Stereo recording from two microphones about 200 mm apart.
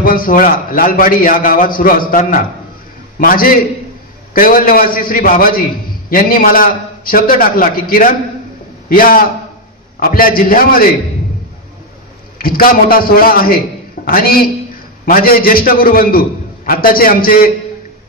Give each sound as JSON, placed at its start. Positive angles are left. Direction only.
{"t": 0.0, "sound": "a man's voice", "side_deg": 45}
{"t": 12.4, "sound": "a man's voice", "side_deg": 45}